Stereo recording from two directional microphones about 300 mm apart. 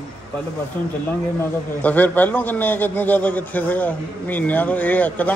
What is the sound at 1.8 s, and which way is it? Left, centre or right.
A man's voice, centre.